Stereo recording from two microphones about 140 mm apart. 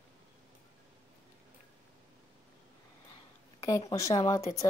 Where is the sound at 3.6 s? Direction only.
25° left (ahead or behind).